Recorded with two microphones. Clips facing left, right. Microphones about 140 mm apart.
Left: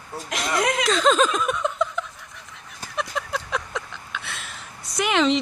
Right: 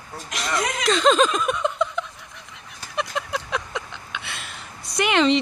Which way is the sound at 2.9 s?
Centre (ahead or behind).